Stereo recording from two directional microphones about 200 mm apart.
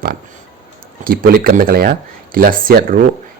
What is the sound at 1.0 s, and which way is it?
A man's voice, 45° right (ahead or behind).